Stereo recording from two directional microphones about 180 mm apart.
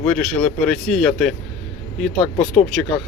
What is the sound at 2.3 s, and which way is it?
Speech, 40° left (ahead or behind).